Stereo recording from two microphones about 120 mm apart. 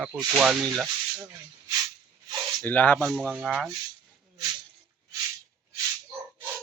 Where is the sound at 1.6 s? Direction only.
30° right (ahead or behind).